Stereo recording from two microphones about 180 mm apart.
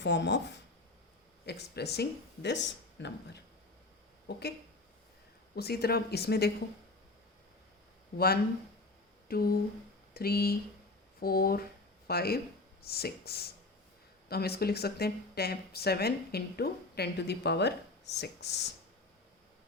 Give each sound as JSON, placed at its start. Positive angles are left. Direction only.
{"t": 0.0, "sound": "speech", "side_deg": 75}
{"t": 5.5, "sound": "speech", "side_deg": 60}
{"t": 9.3, "sound": "speech", "side_deg": 55}